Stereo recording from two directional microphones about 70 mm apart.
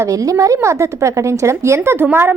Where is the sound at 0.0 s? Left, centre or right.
Right.